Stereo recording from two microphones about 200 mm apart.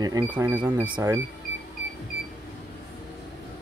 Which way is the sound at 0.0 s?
20° right (ahead or behind).